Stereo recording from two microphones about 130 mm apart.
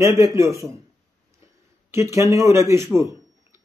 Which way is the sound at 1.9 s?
20° right (ahead or behind).